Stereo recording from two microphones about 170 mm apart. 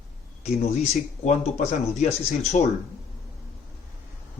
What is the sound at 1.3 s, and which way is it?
Speech, 40° left (ahead or behind).